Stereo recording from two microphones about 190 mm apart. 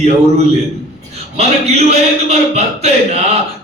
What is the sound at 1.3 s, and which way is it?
A man's voice, 35° right (ahead or behind).